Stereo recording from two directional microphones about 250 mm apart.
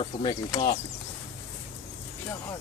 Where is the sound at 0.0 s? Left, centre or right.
Centre.